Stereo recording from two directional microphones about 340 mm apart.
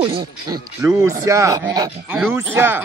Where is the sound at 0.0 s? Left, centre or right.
Centre.